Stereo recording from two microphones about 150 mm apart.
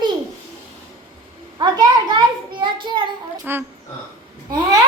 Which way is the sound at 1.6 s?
30° right (ahead or behind).